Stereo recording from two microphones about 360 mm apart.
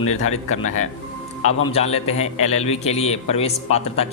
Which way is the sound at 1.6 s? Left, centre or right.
Centre.